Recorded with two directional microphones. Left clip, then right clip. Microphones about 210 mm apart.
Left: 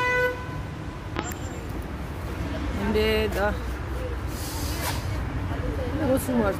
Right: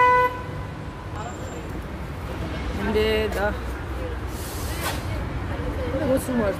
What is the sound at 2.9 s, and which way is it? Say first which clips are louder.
Speech: right 1 dB; 10° left (ahead or behind).